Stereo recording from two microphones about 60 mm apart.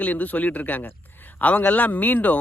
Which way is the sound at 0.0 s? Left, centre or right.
Left.